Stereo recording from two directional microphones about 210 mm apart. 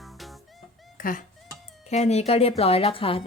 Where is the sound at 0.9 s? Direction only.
40° left (ahead or behind).